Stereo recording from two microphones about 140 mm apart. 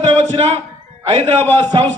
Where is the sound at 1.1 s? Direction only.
50° right (ahead or behind).